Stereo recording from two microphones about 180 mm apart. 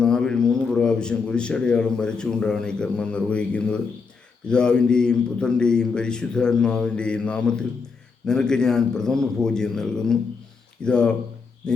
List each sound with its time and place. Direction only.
0.0 s a man's voice: 5° left (ahead or behind)